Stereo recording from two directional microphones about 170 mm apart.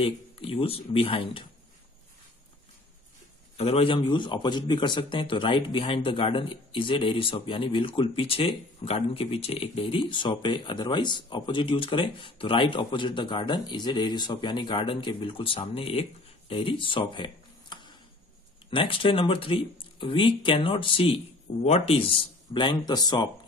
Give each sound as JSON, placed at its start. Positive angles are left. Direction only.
{"t": 0.0, "sound": "speech", "side_deg": 35}
{"t": 3.5, "sound": "a man's voice", "side_deg": 35}